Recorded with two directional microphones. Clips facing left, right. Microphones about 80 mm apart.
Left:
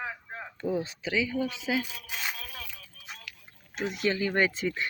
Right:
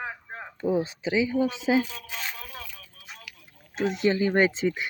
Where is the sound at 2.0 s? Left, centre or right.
Centre.